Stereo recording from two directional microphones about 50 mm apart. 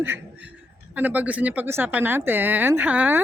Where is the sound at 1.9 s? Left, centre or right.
Right.